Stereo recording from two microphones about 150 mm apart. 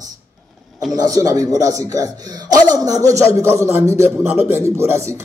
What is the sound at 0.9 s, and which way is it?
A man's voice, 25° right (ahead or behind).